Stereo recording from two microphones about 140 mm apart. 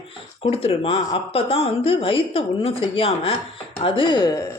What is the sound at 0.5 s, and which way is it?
Speech, 45° left (ahead or behind).